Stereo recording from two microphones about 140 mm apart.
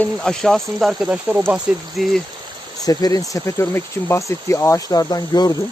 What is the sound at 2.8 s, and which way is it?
Speech, 25° left (ahead or behind).